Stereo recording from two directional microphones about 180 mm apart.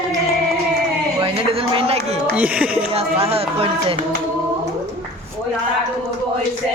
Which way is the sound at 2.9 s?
35° right (ahead or behind).